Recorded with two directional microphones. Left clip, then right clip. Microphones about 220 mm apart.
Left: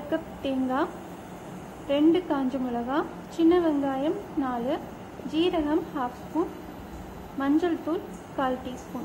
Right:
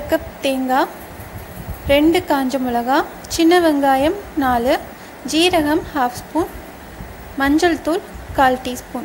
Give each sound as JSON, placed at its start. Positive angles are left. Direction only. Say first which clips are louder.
{"t": 0.1, "sound": "a woman's voice", "louder": "right 11 dB", "side_deg": -25}
{"t": 1.9, "sound": "a woman's voice", "louder": "right 9 dB", "side_deg": -30}
{"t": 7.3, "sound": "a woman's voice", "louder": "right 10 dB", "side_deg": -30}